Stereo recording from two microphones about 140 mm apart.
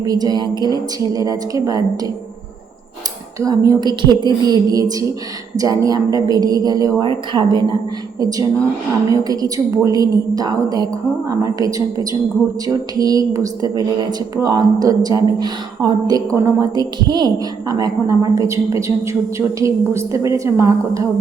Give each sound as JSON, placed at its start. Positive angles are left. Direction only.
{"t": 0.0, "sound": "a woman's voice", "side_deg": -25}
{"t": 3.4, "sound": "a woman's voice", "side_deg": -25}